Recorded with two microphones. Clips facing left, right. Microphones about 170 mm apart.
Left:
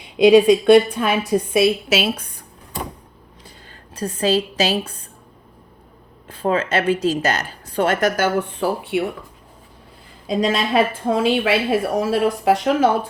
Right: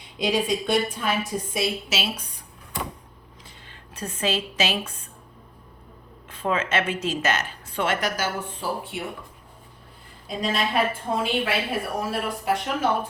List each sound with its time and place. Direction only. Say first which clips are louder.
0.2 s a woman's voice: left 13 dB; 65° left (ahead or behind); by 2.8 s 50° left (ahead or behind)
3.9 s speech: left 8 dB; 35° left (ahead or behind)
6.2 s speech: left 5 dB; 35° left (ahead or behind); by 9.0 s 70° left (ahead or behind)
10.2 s a woman's voice: left 7 dB; 90° left